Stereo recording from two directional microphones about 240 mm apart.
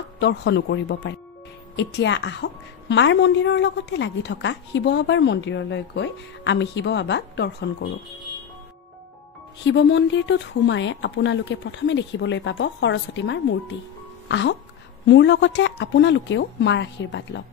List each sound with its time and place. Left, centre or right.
0.2 s a woman's voice: left
9.7 s a woman's voice: left